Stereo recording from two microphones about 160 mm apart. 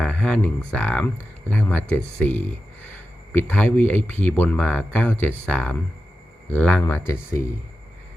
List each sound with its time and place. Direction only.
0.0 s speech: 5° left (ahead or behind)
3.5 s speech: 10° left (ahead or behind)
6.8 s speech: 20° left (ahead or behind)